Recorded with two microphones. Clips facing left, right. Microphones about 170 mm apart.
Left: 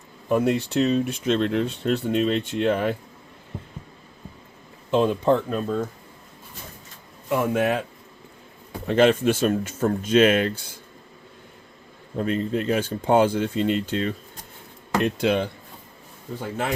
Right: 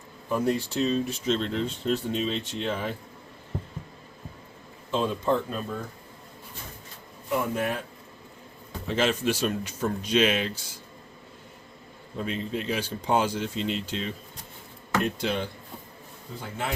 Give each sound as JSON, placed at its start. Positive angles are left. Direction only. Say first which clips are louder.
{"t": 0.3, "sound": "speech", "louder": "left 5 dB", "side_deg": 65}
{"t": 4.9, "sound": "speech", "louder": "left 6 dB", "side_deg": 65}
{"t": 7.3, "sound": "a man's voice", "louder": "left 6 dB", "side_deg": 85}
{"t": 8.9, "sound": "speech", "louder": "left 7 dB", "side_deg": 55}
{"t": 12.1, "sound": "speech", "louder": "left 6 dB", "side_deg": 45}